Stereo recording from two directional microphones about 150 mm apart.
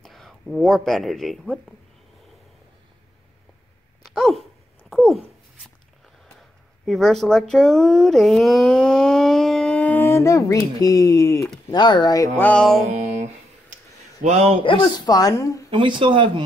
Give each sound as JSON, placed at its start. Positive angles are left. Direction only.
{"t": 0.0, "sound": "speech", "side_deg": 0}
{"t": 4.0, "sound": "dog", "side_deg": 0}
{"t": 6.9, "sound": "a woman's voice", "side_deg": 0}
{"t": 12.4, "sound": "music", "side_deg": 10}
{"t": 14.2, "sound": "a man's voice", "side_deg": -45}
{"t": 14.6, "sound": "a woman's voice", "side_deg": 30}
{"t": 15.7, "sound": "speech", "side_deg": -35}